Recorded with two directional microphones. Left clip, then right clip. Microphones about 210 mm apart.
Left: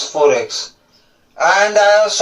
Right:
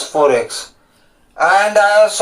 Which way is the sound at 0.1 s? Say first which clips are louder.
Even; 30° right (ahead or behind).